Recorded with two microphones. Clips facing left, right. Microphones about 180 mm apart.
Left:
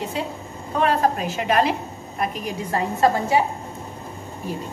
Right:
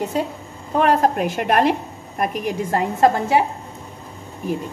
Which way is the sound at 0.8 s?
50° right (ahead or behind).